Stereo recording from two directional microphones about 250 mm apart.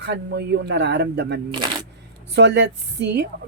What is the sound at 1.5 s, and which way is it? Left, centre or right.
Speech, centre.